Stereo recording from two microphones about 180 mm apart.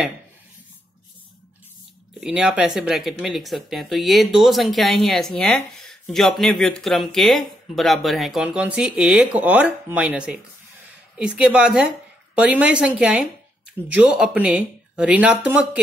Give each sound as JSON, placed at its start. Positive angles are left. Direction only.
{"t": 2.1, "sound": "speech", "side_deg": -5}